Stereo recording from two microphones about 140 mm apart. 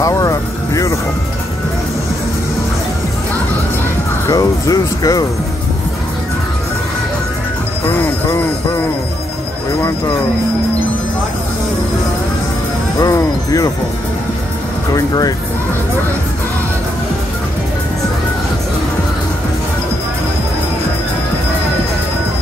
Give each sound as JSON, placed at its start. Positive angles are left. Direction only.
{"t": 0.0, "sound": "music", "side_deg": 25}
{"t": 4.3, "sound": "speech", "side_deg": 25}
{"t": 13.0, "sound": "speech", "side_deg": 25}
{"t": 15.0, "sound": "speech", "side_deg": 25}